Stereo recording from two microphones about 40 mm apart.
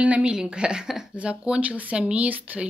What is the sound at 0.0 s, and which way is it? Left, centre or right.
A woman's voice, right.